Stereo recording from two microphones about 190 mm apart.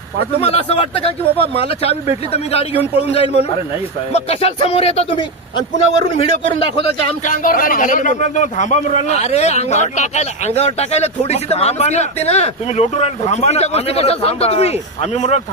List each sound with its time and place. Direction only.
0.4 s a man's voice: 30° left (ahead or behind)
7.2 s a man's voice: 45° left (ahead or behind)